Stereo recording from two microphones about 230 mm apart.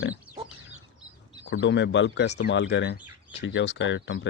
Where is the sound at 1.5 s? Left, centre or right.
Left.